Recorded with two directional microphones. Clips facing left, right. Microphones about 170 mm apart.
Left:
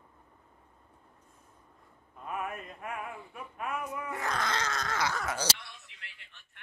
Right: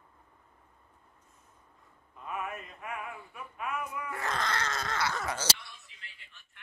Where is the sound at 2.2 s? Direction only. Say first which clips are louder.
Left 1 dB; 40° left (ahead or behind).